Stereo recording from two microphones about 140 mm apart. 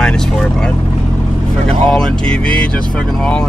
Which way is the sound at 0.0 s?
5° left (ahead or behind).